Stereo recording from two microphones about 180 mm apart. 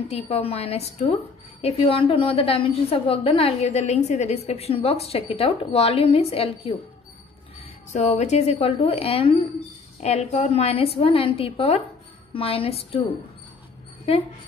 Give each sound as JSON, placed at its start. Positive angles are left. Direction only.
{"t": 0.1, "sound": "a woman's voice", "side_deg": 35}
{"t": 7.9, "sound": "a woman's voice", "side_deg": 40}